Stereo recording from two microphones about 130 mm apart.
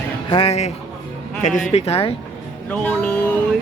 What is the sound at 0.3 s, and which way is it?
Speech, 45° left (ahead or behind).